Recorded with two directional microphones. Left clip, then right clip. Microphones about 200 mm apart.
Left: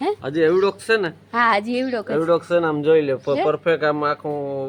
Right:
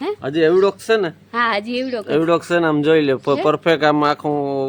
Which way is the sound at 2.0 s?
65° right (ahead or behind).